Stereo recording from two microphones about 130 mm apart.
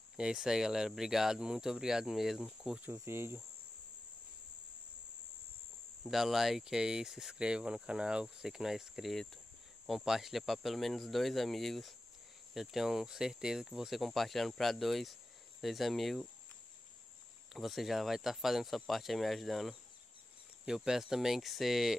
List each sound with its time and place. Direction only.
0.2 s speech: 5° right (ahead or behind)
2.9 s cricket: 20° right (ahead or behind)
6.0 s speech: centre (ahead or behind)
17.5 s speech: centre (ahead or behind)